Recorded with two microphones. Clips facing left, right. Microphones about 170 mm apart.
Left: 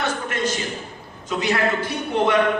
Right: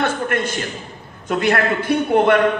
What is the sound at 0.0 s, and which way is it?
A man's voice, 55° right (ahead or behind).